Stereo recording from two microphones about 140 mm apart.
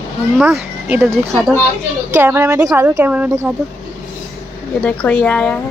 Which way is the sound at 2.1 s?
15° right (ahead or behind).